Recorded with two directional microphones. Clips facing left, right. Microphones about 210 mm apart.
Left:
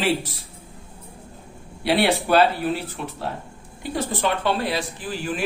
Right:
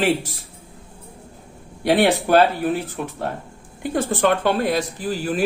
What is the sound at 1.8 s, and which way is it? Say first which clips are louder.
Speech: right 3 dB; 50° right (ahead or behind).